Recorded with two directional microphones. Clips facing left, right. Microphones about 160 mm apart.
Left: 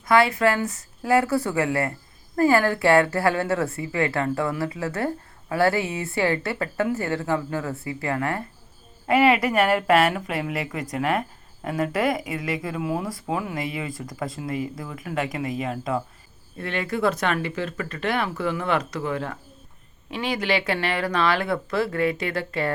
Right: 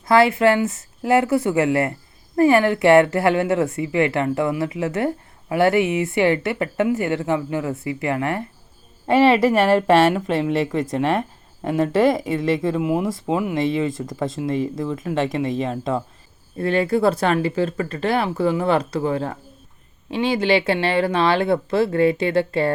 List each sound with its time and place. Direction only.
0.0 s a woman's voice: 25° right (ahead or behind)
16.6 s a woman's voice: 35° right (ahead or behind)